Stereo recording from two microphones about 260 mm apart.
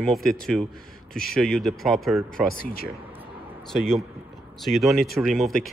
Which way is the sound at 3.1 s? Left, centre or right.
Centre.